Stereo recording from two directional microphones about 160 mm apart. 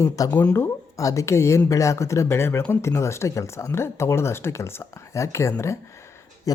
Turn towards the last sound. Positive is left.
turn(degrees=15)  # may be behind; listen again after turning